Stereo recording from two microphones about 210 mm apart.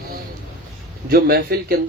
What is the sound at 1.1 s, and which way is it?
Speech, 45° right (ahead or behind).